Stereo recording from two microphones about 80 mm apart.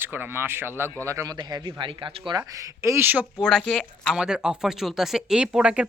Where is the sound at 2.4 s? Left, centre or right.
Right.